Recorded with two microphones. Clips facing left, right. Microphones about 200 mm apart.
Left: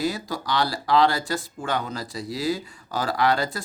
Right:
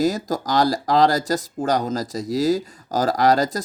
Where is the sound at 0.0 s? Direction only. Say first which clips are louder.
Right 6 dB; 45° right (ahead or behind).